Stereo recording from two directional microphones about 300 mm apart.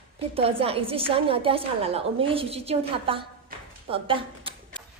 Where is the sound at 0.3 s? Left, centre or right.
Centre.